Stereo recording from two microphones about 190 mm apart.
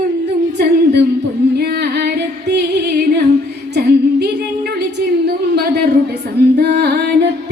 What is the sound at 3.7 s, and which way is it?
Singing, 60° right (ahead or behind).